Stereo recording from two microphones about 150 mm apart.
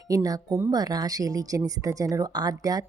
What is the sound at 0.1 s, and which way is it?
Speech, 25° right (ahead or behind).